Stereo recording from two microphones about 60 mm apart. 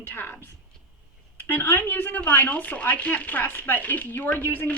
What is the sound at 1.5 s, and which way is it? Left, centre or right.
Speech, left.